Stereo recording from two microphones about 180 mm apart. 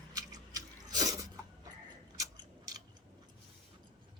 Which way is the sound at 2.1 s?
20° right (ahead or behind).